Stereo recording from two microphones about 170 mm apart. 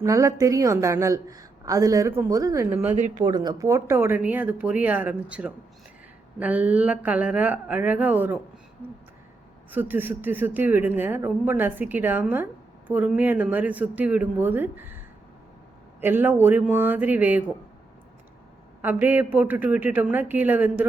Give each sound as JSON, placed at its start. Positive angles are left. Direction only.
{"t": 0.0, "sound": "a woman's voice", "side_deg": -20}
{"t": 9.7, "sound": "speech", "side_deg": -10}
{"t": 18.8, "sound": "speech", "side_deg": -10}